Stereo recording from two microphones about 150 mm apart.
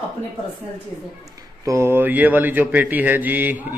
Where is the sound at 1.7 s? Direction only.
15° right (ahead or behind).